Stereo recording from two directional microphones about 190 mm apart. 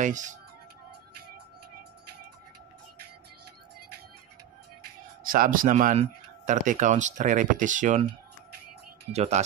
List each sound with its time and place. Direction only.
0.0 s speech: 40° right (ahead or behind)
5.2 s speech: 45° right (ahead or behind)
9.1 s speech: 35° right (ahead or behind)